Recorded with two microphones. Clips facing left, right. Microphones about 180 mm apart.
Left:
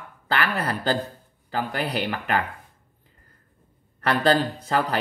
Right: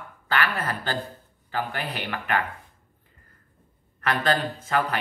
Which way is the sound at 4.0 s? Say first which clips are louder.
Left 4 dB; 35° left (ahead or behind).